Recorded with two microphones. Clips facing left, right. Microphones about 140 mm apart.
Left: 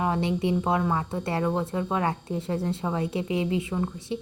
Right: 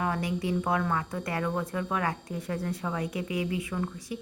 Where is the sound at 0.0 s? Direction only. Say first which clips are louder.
Left 4 dB; 25° left (ahead or behind).